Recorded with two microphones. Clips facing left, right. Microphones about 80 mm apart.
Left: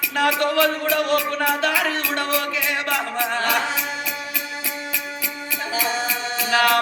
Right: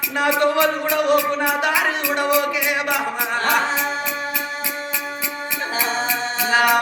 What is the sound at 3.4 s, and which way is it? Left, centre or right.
Music, right.